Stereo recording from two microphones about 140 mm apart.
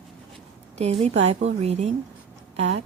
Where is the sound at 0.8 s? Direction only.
45° right (ahead or behind).